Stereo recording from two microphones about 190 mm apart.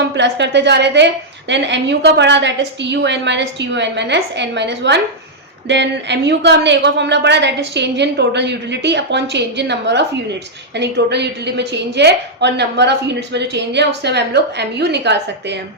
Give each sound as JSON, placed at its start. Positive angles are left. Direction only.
{"t": 0.2, "sound": "a woman's voice", "side_deg": -65}